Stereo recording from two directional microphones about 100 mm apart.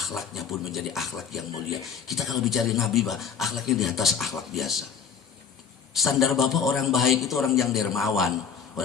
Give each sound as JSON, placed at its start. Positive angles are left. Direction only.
{"t": 0.0, "sound": "speech", "side_deg": 0}
{"t": 5.9, "sound": "speech", "side_deg": 0}